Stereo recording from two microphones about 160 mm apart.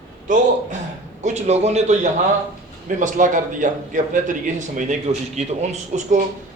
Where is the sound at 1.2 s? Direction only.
45° right (ahead or behind).